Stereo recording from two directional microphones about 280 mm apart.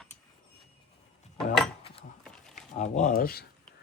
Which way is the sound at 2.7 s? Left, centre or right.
Left.